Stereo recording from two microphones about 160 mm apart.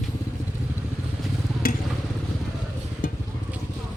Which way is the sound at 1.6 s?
65° left (ahead or behind).